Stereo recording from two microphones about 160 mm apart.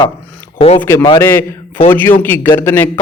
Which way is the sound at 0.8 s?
15° left (ahead or behind).